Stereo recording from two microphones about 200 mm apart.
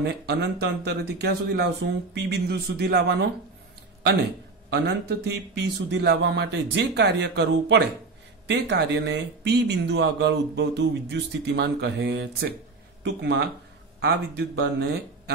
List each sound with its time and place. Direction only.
0.0 s speech: 55° right (ahead or behind)
4.7 s a man's voice: 55° right (ahead or behind)